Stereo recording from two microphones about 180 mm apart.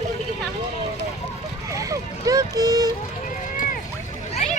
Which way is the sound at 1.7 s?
20° right (ahead or behind).